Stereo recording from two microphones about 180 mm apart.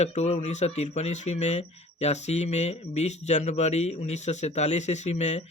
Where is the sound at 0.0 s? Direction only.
40° left (ahead or behind).